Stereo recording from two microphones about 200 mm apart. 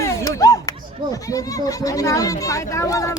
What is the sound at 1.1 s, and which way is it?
Speech, 15° left (ahead or behind).